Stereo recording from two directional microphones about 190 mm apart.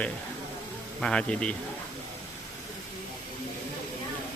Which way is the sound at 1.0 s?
5° left (ahead or behind).